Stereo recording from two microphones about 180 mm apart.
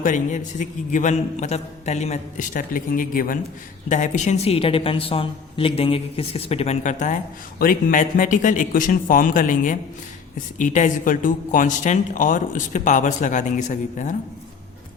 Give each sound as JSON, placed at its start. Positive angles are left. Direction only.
{"t": 0.0, "sound": "a woman's voice", "side_deg": 45}